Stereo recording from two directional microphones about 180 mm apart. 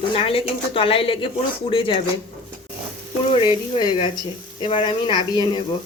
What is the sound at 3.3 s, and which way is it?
Speech, 25° left (ahead or behind).